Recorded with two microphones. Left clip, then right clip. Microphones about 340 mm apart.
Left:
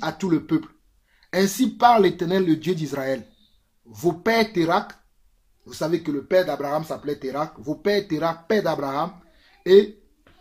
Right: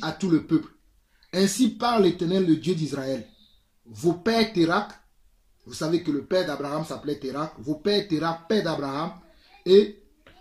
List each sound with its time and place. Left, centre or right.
0.0 s speech: left
1.6 s speech: left
9.6 s hiccup: left